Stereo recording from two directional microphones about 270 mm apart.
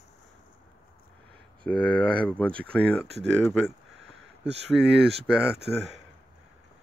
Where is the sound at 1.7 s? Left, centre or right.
Centre.